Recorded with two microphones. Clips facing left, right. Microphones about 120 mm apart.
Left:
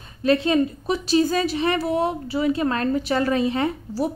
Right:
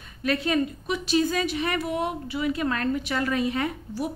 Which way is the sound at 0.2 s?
30° left (ahead or behind).